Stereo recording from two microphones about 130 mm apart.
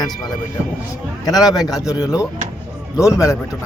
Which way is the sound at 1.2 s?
30° left (ahead or behind).